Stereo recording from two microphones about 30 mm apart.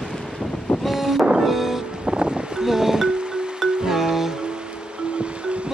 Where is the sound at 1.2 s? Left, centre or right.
Right.